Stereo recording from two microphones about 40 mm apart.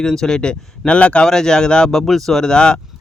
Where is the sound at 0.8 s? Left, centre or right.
Left.